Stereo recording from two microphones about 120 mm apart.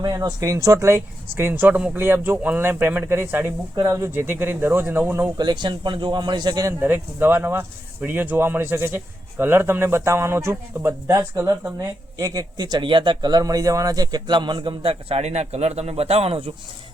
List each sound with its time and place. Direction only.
0.0 s a man's voice: 35° right (ahead or behind); by 5.3 s 15° right (ahead or behind)
5.4 s speech: 40° right (ahead or behind)
6.7 s a man's voice: 15° right (ahead or behind); by 16.5 s 55° right (ahead or behind)